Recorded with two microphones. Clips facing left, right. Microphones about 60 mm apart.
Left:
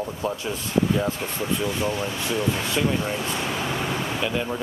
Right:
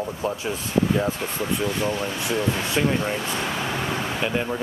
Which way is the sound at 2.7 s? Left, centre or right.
Centre.